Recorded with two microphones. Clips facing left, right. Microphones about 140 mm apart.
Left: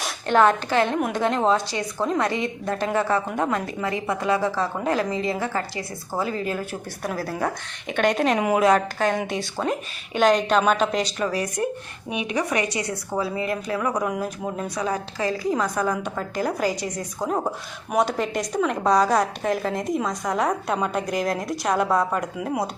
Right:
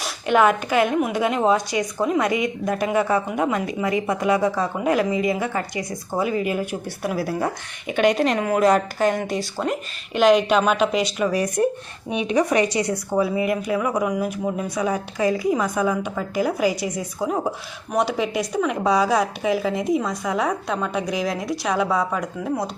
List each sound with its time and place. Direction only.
0.0 s a woman's voice: 10° right (ahead or behind)
8.4 s speech: 10° left (ahead or behind)
8.6 s a woman's voice: 5° right (ahead or behind)
11.3 s a woman's voice: 20° right (ahead or behind); by 22.7 s 5° left (ahead or behind)